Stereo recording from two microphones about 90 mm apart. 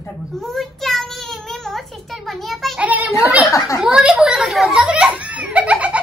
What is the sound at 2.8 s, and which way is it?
Speech, 15° right (ahead or behind).